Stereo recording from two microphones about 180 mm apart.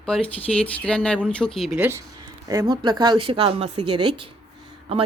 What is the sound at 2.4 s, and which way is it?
A woman's voice, 25° right (ahead or behind).